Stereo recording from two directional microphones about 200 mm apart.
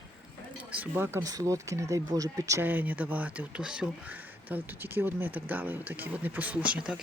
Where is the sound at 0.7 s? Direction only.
10° right (ahead or behind).